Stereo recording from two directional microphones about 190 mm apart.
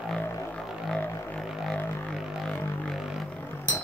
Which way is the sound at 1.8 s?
10° left (ahead or behind).